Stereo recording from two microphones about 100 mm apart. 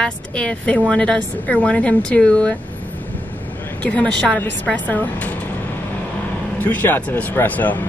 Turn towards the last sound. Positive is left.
turn(degrees=15)  # may be behind; listen again after turning